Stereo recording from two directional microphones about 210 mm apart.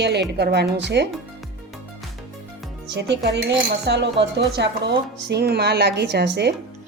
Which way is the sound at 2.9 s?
55° right (ahead or behind).